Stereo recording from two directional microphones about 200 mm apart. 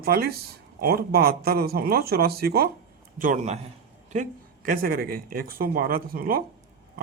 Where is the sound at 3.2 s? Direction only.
40° right (ahead or behind).